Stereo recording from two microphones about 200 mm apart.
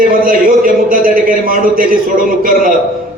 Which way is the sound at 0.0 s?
45° right (ahead or behind).